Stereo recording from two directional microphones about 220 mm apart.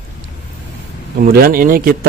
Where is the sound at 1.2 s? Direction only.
40° right (ahead or behind).